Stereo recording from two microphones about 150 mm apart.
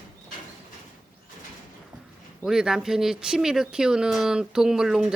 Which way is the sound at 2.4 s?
5° right (ahead or behind).